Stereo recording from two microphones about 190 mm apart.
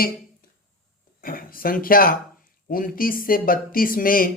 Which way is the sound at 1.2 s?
50° left (ahead or behind).